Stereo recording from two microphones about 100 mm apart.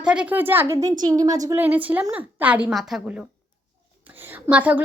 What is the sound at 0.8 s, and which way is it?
Speech, 35° right (ahead or behind).